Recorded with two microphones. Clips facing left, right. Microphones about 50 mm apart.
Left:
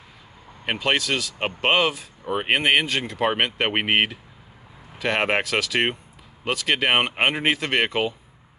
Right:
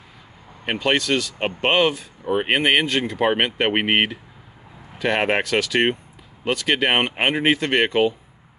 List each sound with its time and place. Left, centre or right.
0.7 s speech: centre